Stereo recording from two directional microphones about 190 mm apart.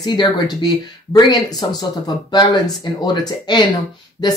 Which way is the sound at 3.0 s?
25° left (ahead or behind).